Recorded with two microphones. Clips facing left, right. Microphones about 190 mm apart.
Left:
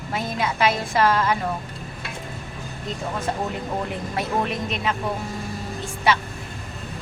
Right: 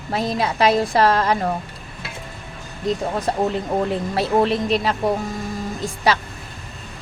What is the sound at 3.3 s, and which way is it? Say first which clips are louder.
A woman's voice: right 7 dB; 35° right (ahead or behind).